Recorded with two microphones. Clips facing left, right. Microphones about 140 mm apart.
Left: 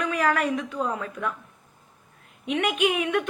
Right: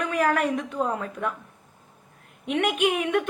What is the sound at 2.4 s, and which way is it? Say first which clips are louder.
Speech: right 1 dB; 55° right (ahead or behind).